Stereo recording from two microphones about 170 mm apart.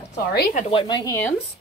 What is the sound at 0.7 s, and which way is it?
Speech, 25° left (ahead or behind).